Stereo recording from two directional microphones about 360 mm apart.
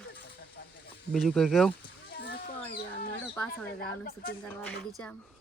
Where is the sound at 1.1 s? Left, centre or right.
Centre.